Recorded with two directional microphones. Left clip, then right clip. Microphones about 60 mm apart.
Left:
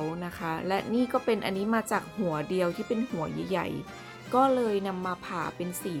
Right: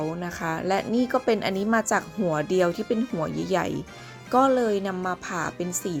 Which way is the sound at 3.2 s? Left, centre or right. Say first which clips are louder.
Right 5 dB; right.